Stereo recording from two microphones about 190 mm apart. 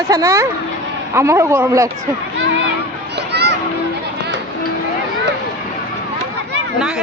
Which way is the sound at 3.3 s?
60° right (ahead or behind).